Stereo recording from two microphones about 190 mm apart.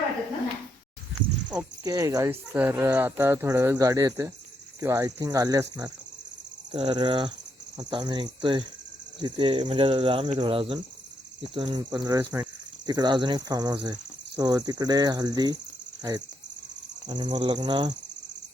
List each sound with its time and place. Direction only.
1.8 s speech: 20° right (ahead or behind)
17.1 s speech: 20° right (ahead or behind)